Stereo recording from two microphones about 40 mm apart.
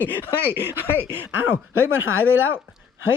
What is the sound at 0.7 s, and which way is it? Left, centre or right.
Speech, right.